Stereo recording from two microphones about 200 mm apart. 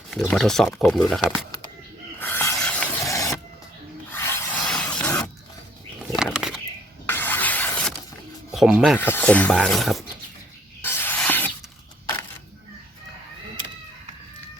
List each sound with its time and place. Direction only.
0.2 s speech: 5° left (ahead or behind)
2.1 s snake: 10° left (ahead or behind)
3.0 s printer: 15° left (ahead or behind)
4.1 s rub: 10° left (ahead or behind)
4.9 s a sound: 5° left (ahead or behind)
7.1 s a sound: 10° left (ahead or behind)
8.5 s speech: centre (ahead or behind)
9.0 s speech: 10° left (ahead or behind)
10.8 s a sound: 10° left (ahead or behind)